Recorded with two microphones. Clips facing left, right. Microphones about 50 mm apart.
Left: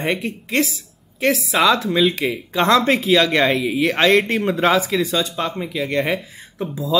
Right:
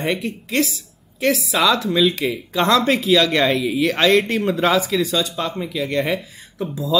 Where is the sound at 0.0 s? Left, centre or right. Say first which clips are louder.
Even; left.